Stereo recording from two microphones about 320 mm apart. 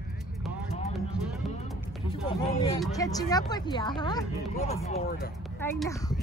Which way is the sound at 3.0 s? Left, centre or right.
Centre.